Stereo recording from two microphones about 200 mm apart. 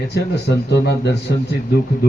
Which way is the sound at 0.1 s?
55° left (ahead or behind).